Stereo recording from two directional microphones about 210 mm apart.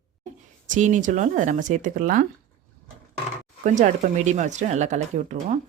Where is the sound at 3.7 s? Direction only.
35° right (ahead or behind).